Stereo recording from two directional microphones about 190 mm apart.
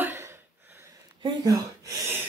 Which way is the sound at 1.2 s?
20° right (ahead or behind).